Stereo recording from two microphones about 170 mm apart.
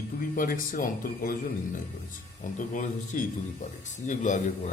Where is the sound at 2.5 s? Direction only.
50° left (ahead or behind).